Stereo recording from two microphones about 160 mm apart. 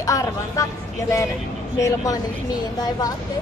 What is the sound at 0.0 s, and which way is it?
Vehicle, 20° left (ahead or behind).